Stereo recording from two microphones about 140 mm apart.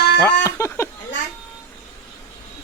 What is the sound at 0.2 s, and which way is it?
Speech, 15° left (ahead or behind).